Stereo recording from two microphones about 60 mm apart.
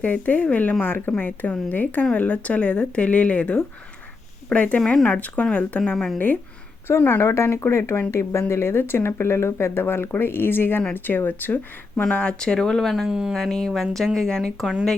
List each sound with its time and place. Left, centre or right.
0.0 s a woman's voice: left
6.1 s speech: left
7.2 s speech: left
12.1 s speech: centre
13.1 s speech: centre
13.3 s speech: centre